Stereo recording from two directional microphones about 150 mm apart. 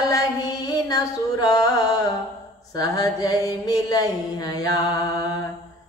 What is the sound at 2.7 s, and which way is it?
Mantra, 25° left (ahead or behind).